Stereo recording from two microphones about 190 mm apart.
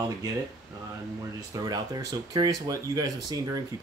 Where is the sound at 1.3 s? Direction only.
20° right (ahead or behind).